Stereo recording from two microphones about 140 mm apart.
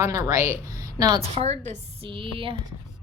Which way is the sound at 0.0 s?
25° right (ahead or behind).